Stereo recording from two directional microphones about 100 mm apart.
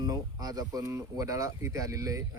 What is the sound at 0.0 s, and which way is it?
Speech, 40° right (ahead or behind).